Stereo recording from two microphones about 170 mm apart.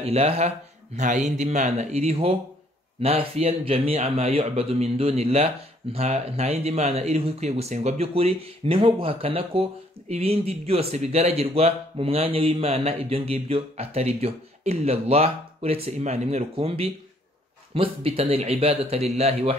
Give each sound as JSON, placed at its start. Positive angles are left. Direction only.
{"t": 0.0, "sound": "speech", "side_deg": -35}